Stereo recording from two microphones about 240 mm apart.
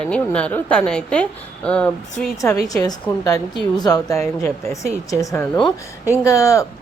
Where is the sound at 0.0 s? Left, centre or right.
Centre.